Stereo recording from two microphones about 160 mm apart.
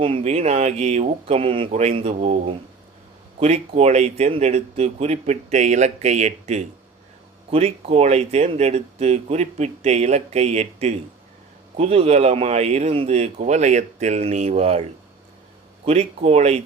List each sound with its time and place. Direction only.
0.0 s speech: 35° right (ahead or behind)
15.9 s speech: 40° right (ahead or behind)